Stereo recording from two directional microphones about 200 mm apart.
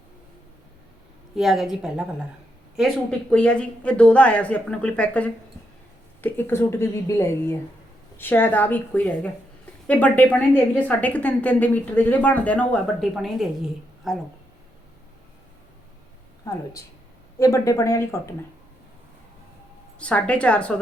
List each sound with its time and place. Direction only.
1.4 s a woman's voice: centre (ahead or behind)
16.4 s a woman's voice: 15° left (ahead or behind)
20.0 s a woman's voice: 5° left (ahead or behind)